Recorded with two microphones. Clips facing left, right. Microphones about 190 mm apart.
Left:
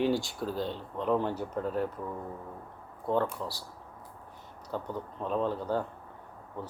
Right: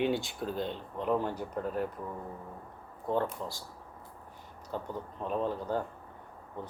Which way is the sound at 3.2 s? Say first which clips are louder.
Left 2 dB; 35° left (ahead or behind).